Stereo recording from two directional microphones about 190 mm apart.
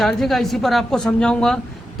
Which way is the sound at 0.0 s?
Centre (ahead or behind).